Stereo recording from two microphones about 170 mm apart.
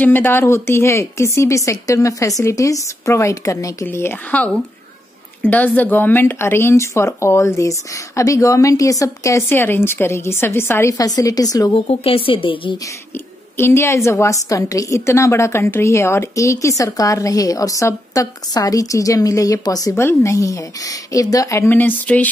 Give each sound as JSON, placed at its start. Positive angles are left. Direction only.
{"t": 0.0, "sound": "a woman's voice", "side_deg": 10}
{"t": 11.9, "sound": "a woman's voice", "side_deg": 35}
{"t": 13.6, "sound": "a woman's voice", "side_deg": 15}